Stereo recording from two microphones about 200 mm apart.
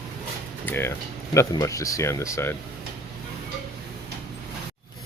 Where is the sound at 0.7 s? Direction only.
10° left (ahead or behind).